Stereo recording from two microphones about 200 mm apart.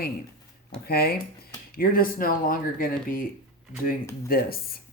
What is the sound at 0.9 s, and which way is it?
Speech, 50° left (ahead or behind).